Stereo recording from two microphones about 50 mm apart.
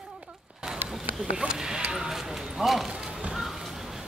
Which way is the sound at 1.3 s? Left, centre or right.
Centre.